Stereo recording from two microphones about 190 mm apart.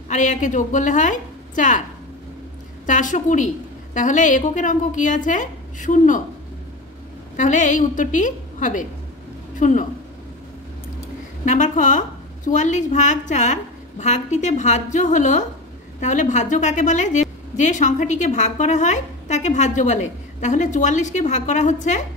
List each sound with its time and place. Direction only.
0.1 s a woman's voice: 40° left (ahead or behind)
2.9 s a woman's voice: 40° left (ahead or behind)
7.3 s a woman's voice: 40° left (ahead or behind)
11.4 s a woman's voice: 40° left (ahead or behind)